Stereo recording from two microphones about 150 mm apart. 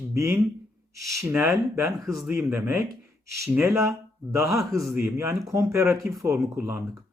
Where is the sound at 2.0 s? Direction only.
Centre (ahead or behind).